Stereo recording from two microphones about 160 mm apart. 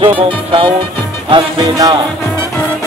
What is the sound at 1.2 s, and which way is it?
Music, 25° right (ahead or behind).